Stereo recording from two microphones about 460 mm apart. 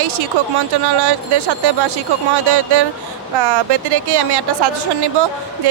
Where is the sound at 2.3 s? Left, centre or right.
Right.